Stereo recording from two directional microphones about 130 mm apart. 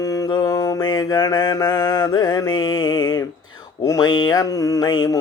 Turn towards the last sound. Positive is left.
turn(degrees=30)  # may be behind; listen again after turning